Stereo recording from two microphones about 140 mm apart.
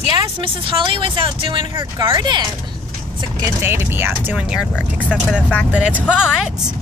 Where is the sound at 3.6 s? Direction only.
15° right (ahead or behind).